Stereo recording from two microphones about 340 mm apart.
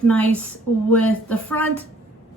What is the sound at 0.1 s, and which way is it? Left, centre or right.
A woman's voice, centre.